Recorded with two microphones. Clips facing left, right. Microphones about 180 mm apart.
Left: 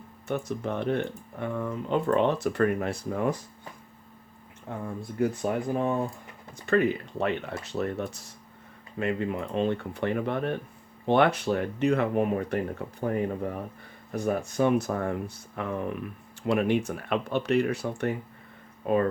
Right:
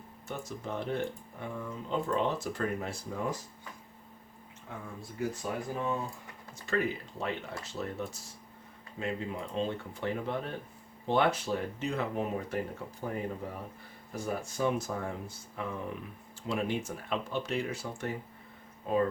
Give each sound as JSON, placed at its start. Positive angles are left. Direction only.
{"t": 0.3, "sound": "speech", "side_deg": 65}
{"t": 5.1, "sound": "speech", "side_deg": 55}